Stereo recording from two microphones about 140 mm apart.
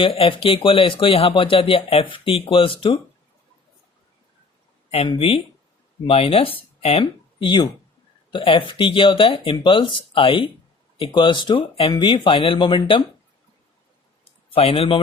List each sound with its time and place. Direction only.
0.0 s speech: 40° left (ahead or behind)
5.0 s speech: 40° left (ahead or behind)
14.5 s speech: 40° left (ahead or behind)